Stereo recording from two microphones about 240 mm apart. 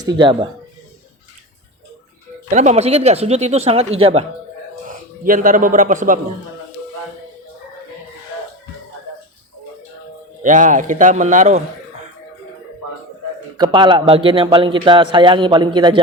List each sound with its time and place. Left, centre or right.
0.0 s a man's voice: centre
2.5 s a man's voice: right
4.9 s a man's voice: right
10.4 s a man's voice: right
13.6 s a man's voice: centre